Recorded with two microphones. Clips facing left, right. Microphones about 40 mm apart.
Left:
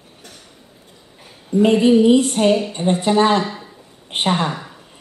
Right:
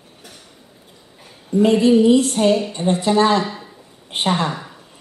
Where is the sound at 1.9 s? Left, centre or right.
Centre.